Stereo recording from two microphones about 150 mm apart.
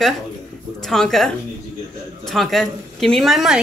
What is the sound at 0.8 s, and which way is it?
A woman's voice, centre (ahead or behind).